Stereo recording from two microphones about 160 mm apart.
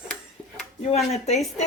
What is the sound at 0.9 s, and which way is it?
Speech, 40° left (ahead or behind).